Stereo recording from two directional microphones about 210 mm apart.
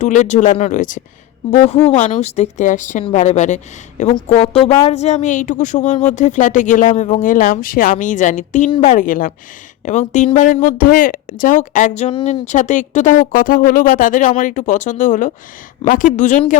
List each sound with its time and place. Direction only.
0.0 s speech: 35° left (ahead or behind)